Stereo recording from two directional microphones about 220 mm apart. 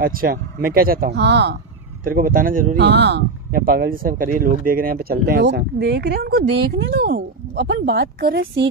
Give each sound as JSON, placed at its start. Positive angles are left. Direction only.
{"t": 0.0, "sound": "speech", "side_deg": -40}
{"t": 2.0, "sound": "speech", "side_deg": -40}